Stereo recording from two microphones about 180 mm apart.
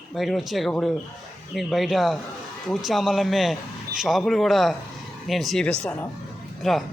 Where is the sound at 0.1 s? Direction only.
Centre (ahead or behind).